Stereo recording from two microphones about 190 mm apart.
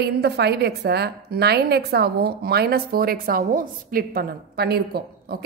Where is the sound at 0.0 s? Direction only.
60° right (ahead or behind).